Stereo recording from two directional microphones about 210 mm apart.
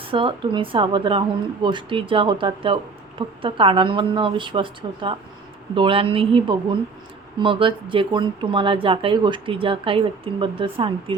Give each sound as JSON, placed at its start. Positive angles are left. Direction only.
{"t": 0.0, "sound": "speech", "side_deg": -25}